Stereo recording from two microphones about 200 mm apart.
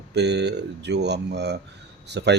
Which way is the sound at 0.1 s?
55° right (ahead or behind).